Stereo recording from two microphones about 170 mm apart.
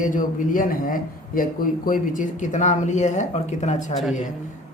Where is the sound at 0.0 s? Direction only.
50° left (ahead or behind).